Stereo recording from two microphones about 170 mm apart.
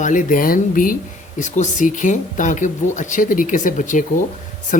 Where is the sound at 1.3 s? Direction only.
45° left (ahead or behind).